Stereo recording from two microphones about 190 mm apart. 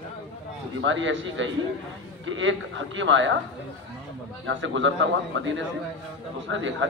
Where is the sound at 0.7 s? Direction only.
80° right.